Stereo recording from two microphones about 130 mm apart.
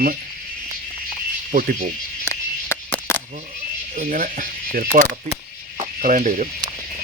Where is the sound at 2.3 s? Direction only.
20° left (ahead or behind).